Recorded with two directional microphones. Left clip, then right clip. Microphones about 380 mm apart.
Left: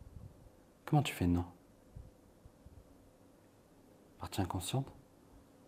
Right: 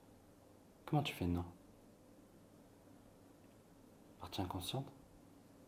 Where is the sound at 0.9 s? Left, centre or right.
Left.